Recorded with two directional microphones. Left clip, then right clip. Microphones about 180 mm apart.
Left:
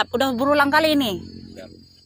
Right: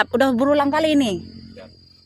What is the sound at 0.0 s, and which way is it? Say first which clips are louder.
A woman's voice: right 3 dB; 45° right (ahead or behind).